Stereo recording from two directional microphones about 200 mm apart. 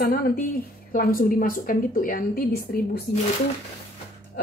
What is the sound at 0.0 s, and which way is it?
A woman's voice, 45° left (ahead or behind).